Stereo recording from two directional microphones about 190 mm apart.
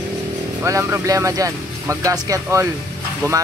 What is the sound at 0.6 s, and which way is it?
Speech, 15° right (ahead or behind).